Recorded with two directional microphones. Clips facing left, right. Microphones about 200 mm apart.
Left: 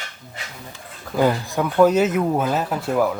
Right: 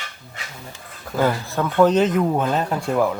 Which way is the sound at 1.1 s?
15° left (ahead or behind).